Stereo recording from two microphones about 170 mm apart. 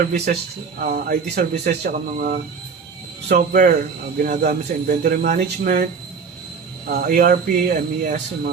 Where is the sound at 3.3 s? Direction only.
50° right (ahead or behind).